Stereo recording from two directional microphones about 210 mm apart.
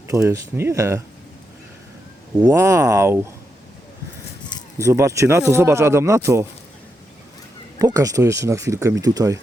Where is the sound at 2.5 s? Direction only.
15° right (ahead or behind).